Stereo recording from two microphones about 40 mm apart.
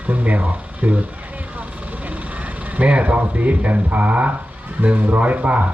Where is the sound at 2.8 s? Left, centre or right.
Right.